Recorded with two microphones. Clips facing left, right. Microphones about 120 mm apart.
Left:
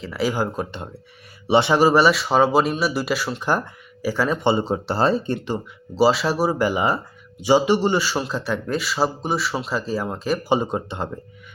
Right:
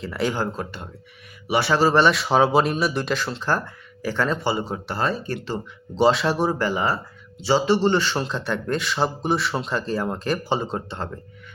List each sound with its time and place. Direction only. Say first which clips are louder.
0.0 s speech: left 2 dB; 5° left (ahead or behind)
0.5 s speech: left 3 dB; 20° left (ahead or behind)
4.4 s speech: left 5 dB; 25° left (ahead or behind)
5.5 s speech: left 1 dB; 5° left (ahead or behind)
10.4 s speech: left 4 dB; 15° left (ahead or behind)